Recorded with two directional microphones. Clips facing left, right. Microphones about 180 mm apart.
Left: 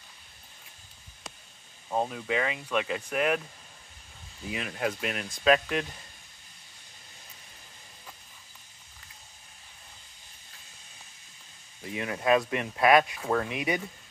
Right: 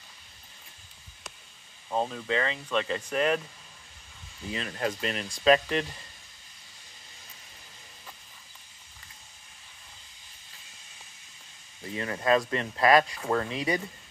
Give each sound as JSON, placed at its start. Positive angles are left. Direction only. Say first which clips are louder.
{"t": 1.9, "sound": "speech", "louder": "even", "side_deg": 10}
{"t": 4.5, "sound": "speech", "louder": "even", "side_deg": 10}
{"t": 11.8, "sound": "speech", "louder": "even", "side_deg": 10}